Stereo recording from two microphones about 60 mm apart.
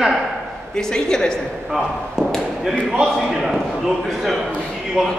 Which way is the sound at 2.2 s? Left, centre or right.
Centre.